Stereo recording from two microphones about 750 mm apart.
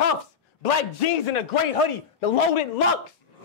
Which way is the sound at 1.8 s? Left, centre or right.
Left.